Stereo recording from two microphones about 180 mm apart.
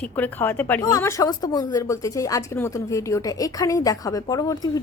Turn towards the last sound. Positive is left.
turn(degrees=20)  # may be behind; listen again after turning